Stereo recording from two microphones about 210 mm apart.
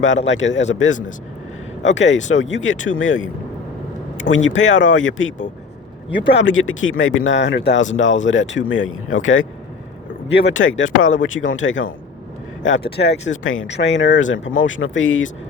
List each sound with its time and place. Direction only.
0.0 s speech: 60° left (ahead or behind)
0.9 s speech: 35° left (ahead or behind)
1.8 s speech: 60° left (ahead or behind)
4.4 s speech: 65° left (ahead or behind)
10.2 s speech: 55° left (ahead or behind)